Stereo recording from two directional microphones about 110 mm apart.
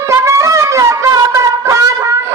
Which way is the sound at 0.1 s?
25° right (ahead or behind).